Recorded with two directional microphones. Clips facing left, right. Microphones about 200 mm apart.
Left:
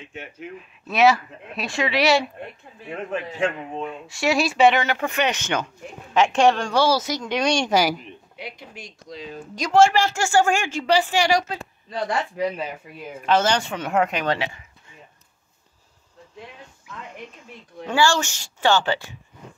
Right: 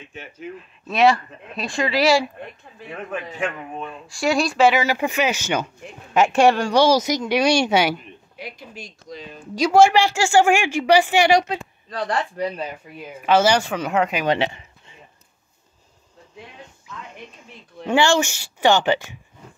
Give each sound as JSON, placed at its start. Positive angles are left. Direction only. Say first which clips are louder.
{"t": 0.6, "sound": "speech", "louder": "even", "side_deg": 5}
{"t": 2.9, "sound": "a man's voice", "louder": "left 2 dB", "side_deg": 25}
{"t": 3.9, "sound": "a woman's voice", "louder": "right 2 dB", "side_deg": 0}
{"t": 9.6, "sound": "a woman's voice", "louder": "right 2 dB", "side_deg": -5}
{"t": 12.1, "sound": "speech", "louder": "right 1 dB", "side_deg": 5}
{"t": 13.2, "sound": "speech", "louder": "right 3 dB", "side_deg": -5}
{"t": 14.4, "sound": "a sound", "louder": "right 6 dB", "side_deg": -25}
{"t": 17.8, "sound": "a woman's voice", "louder": "right 3 dB", "side_deg": -20}